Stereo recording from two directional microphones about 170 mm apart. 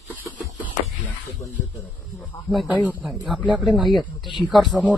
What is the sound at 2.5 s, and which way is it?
Speech, centre (ahead or behind).